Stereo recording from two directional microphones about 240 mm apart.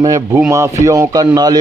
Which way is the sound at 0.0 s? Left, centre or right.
Centre.